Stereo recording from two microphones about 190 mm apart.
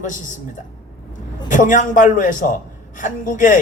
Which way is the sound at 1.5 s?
45° left (ahead or behind).